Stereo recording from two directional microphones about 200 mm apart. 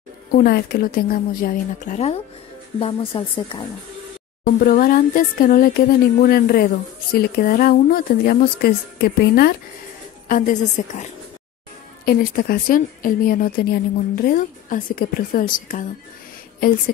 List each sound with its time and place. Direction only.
0.3 s speech: 50° left (ahead or behind); by 3.6 s 25° left (ahead or behind)
4.5 s a woman's voice: 45° left (ahead or behind)